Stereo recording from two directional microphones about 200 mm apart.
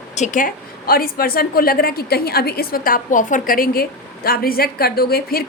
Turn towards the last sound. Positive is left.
turn(degrees=50)  # may be behind; listen again after turning